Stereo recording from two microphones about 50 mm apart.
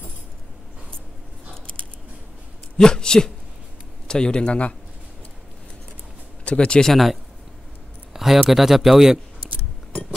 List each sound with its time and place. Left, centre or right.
2.8 s a man's voice: centre
6.4 s speech: left
6.9 s speech: centre
8.1 s a sound: centre
8.5 s speech: centre